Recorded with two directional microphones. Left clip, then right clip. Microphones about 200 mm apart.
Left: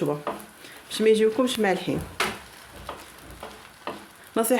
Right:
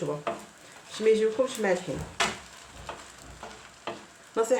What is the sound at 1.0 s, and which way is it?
Speech, 55° left (ahead or behind).